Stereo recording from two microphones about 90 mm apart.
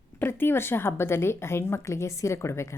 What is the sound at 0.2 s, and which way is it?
A woman's voice, 25° left (ahead or behind).